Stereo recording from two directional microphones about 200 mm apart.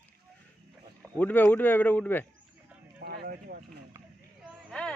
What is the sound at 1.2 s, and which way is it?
Speech, 10° left (ahead or behind).